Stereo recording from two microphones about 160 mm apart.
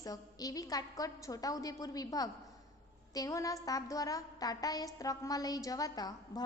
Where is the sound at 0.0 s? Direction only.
25° left (ahead or behind).